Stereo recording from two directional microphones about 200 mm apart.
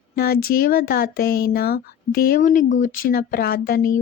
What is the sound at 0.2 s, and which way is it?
Speech, 50° left (ahead or behind).